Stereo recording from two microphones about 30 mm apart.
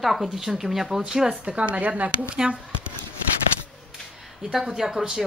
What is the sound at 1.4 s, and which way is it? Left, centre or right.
Speech, right.